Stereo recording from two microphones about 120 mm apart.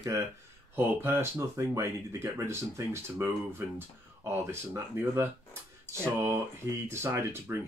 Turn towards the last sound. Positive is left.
turn(degrees=-20)  # may be behind; listen again after turning